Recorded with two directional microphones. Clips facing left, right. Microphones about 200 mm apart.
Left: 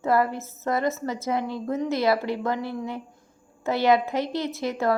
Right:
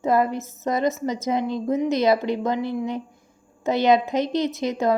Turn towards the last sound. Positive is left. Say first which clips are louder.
# right 3 dB
turn(degrees=-20)  # may be behind; listen again after turning